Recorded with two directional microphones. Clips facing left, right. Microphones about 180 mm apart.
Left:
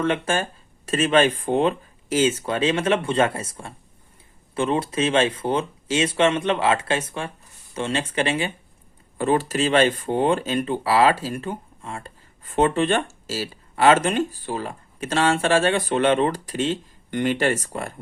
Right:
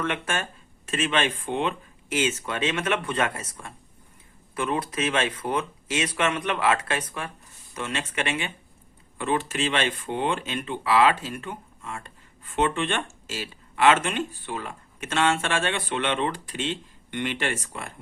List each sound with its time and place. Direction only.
0.0 s speech: 30° left (ahead or behind)